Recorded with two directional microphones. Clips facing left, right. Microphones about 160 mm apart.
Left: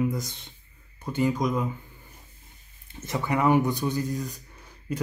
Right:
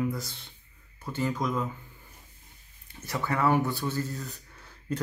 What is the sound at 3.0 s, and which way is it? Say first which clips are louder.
Speech: left 3 dB; 20° left (ahead or behind).